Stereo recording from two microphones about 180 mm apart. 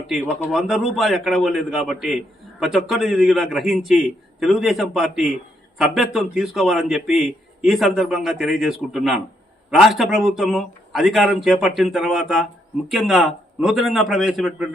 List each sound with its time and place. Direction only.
0.1 s a man's voice: centre (ahead or behind)